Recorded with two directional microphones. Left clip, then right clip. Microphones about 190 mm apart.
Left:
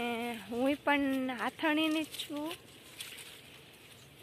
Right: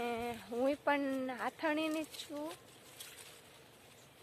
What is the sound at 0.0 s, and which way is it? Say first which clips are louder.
Speech: left 2 dB; centre (ahead or behind).